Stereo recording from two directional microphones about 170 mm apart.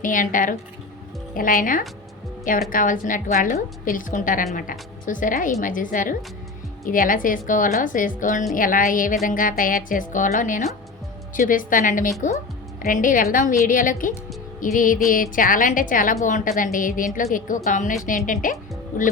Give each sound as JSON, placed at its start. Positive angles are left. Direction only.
{"t": 0.0, "sound": "a woman's voice", "side_deg": 50}